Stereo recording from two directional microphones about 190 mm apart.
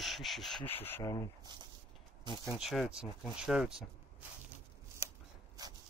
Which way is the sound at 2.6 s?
Centre (ahead or behind).